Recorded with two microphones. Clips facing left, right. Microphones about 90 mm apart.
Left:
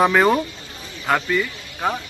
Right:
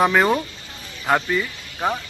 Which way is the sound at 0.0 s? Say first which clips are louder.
Left 1 dB; centre (ahead or behind).